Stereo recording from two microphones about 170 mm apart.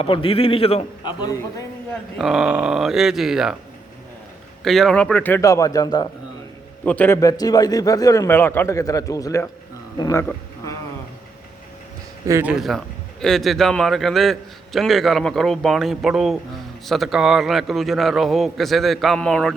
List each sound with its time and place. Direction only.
0.0 s a man's voice: 30° left (ahead or behind)
1.2 s a man's voice: 20° left (ahead or behind)
2.1 s a man's voice: centre (ahead or behind)
4.6 s a man's voice: centre (ahead or behind); by 6.1 s 25° left (ahead or behind)
6.8 s a man's voice: 10° left (ahead or behind)
12.2 s a man's voice: 15° right (ahead or behind); by 19.5 s 5° left (ahead or behind)